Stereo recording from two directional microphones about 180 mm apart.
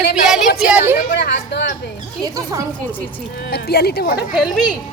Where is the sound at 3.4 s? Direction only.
60° left (ahead or behind).